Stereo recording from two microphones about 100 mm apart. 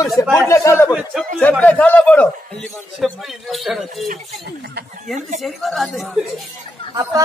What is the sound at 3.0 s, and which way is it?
Speech, centre (ahead or behind).